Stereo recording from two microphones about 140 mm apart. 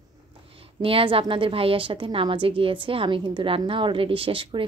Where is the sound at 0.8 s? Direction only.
40° right (ahead or behind).